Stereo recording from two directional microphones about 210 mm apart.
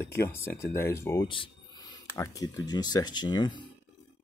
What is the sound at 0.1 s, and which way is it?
Speech, 10° left (ahead or behind).